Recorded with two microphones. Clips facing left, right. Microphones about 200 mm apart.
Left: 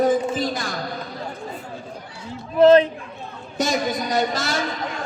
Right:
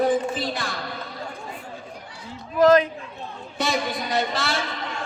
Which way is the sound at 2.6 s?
30° left (ahead or behind).